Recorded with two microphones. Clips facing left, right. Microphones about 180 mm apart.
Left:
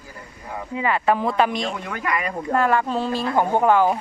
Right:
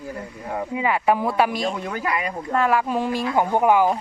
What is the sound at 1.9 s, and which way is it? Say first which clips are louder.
Speech: right 1 dB; 35° right (ahead or behind).